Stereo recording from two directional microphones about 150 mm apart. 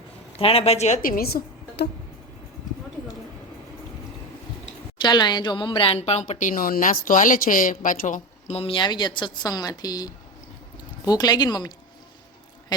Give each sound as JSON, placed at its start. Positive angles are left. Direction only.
{"t": 0.3, "sound": "speech", "side_deg": 40}
{"t": 1.0, "sound": "a woman's voice", "side_deg": 80}
{"t": 5.0, "sound": "speech", "side_deg": 30}